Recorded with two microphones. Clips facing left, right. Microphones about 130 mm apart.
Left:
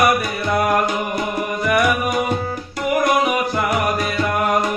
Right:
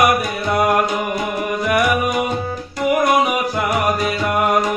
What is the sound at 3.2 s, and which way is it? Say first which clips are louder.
Music: even; centre (ahead or behind).